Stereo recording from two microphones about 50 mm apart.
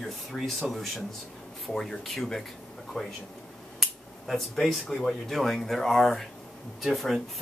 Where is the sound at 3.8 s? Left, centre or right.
Centre.